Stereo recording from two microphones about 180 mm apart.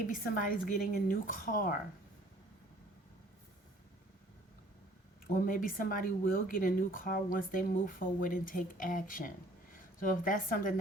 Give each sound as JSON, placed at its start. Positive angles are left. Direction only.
{"t": 0.1, "sound": "speech", "side_deg": 50}
{"t": 5.3, "sound": "speech", "side_deg": 50}